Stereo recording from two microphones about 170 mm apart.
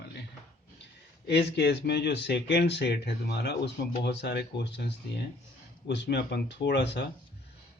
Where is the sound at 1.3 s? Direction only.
85° left.